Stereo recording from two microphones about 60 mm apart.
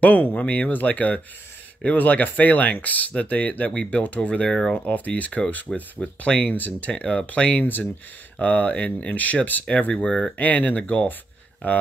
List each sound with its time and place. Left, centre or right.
0.0 s speech: left
4.5 s speech: centre
4.8 s speech: left